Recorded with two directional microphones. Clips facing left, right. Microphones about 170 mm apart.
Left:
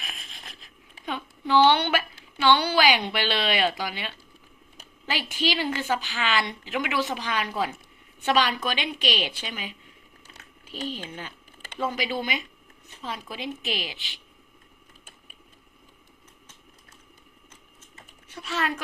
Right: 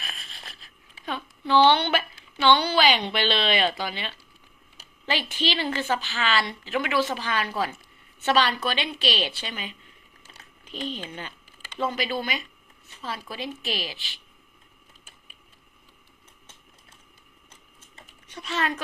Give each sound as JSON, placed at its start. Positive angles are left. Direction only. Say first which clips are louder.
{"t": 0.0, "sound": "a sound", "louder": "even", "side_deg": 15}
{"t": 5.0, "sound": "a woman's voice", "louder": "even", "side_deg": 10}
{"t": 10.8, "sound": "a woman's voice", "louder": "even", "side_deg": 10}
{"t": 18.3, "sound": "a woman's voice", "louder": "right 1 dB", "side_deg": 10}